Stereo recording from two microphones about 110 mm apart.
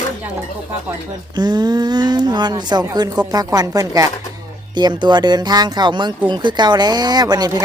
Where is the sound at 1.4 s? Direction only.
40° right (ahead or behind).